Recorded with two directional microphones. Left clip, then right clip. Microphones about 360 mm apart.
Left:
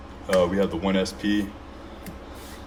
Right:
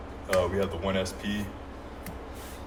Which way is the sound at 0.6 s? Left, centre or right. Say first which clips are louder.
Left 5 dB; centre.